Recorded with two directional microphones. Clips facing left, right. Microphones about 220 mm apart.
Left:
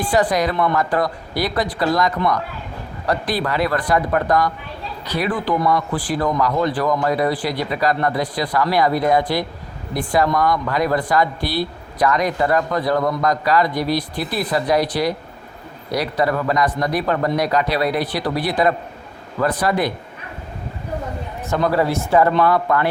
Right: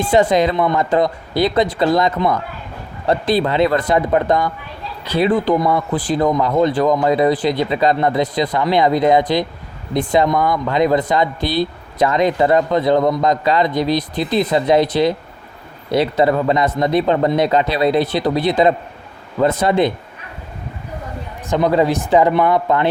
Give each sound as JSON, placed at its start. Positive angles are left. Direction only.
{"t": 0.0, "sound": "speech", "side_deg": -25}
{"t": 21.5, "sound": "speech", "side_deg": -20}